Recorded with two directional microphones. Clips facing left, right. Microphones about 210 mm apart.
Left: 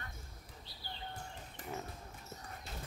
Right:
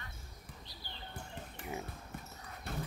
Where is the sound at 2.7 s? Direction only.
60° right (ahead or behind).